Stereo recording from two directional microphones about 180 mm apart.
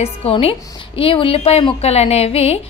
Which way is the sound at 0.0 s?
35° left (ahead or behind).